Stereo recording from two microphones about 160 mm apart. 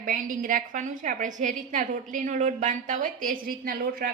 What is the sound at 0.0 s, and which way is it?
A woman's voice, 60° right (ahead or behind).